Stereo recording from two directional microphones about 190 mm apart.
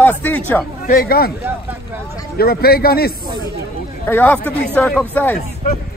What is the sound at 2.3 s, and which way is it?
Speech, 55° left (ahead or behind).